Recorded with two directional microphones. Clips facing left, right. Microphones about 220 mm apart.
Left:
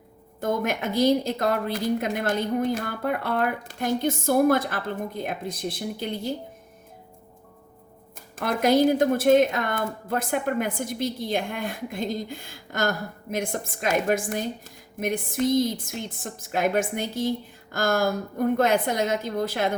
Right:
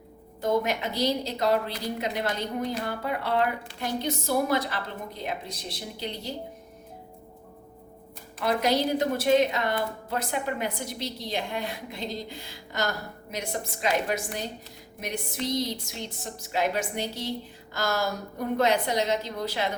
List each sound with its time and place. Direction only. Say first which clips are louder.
0.4 s a woman's voice: even; 50° left (ahead or behind)
8.4 s a woman's voice: left 5 dB; 50° left (ahead or behind)